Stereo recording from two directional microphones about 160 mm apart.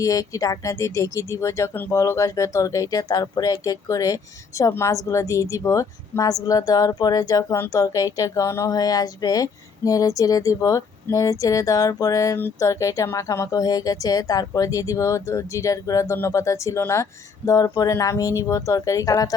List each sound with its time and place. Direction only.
0.0 s speech: 20° left (ahead or behind)